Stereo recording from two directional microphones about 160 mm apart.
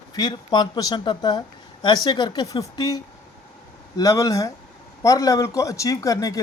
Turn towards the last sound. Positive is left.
turn(degrees=20)  # may be behind; listen again after turning